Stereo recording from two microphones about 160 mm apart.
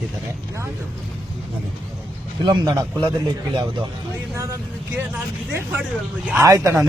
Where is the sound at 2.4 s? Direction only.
30° right (ahead or behind).